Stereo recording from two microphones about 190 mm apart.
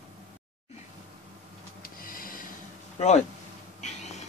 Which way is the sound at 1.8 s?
50° left (ahead or behind).